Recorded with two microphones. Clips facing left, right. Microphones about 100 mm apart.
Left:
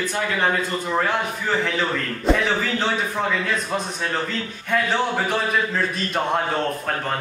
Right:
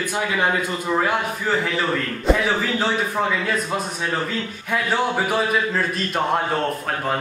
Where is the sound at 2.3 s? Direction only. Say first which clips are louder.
Right 1 dB; 5° right (ahead or behind).